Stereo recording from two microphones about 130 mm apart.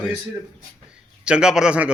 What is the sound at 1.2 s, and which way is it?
Speech, 5° right (ahead or behind).